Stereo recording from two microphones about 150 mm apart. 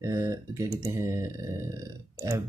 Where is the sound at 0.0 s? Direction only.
20° right (ahead or behind).